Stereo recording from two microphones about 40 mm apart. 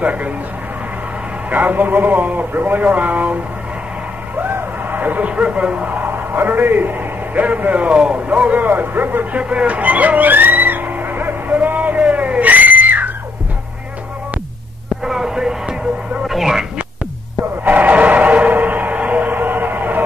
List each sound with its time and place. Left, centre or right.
0.0 s a man's voice: right
1.5 s a man's voice: right
4.9 s speech: right
5.3 s a man's voice: right
5.9 s a man's voice: right
8.6 s a man's voice: right
9.4 s vehicle: right
12.0 s screaming: right
15.0 s a sound: centre
16.3 s a sound: centre
17.6 s a sound: right